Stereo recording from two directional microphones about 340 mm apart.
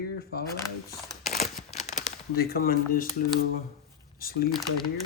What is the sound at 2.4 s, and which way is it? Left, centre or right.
Speech, left.